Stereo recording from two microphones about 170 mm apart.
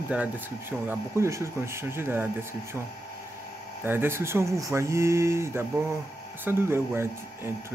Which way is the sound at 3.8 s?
15° right (ahead or behind).